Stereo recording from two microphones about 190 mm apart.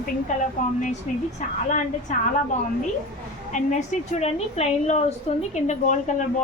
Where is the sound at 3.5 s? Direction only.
40° left (ahead or behind).